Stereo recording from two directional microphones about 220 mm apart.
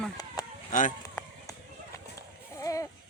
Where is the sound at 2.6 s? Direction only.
15° left (ahead or behind).